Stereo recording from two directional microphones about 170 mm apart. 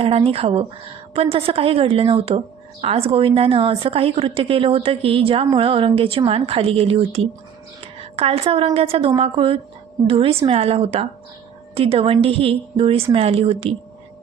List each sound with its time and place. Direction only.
0.0 s a woman's voice: 35° right (ahead or behind)